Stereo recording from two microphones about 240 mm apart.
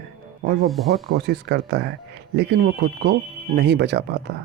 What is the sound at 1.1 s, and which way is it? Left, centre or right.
Speech, right.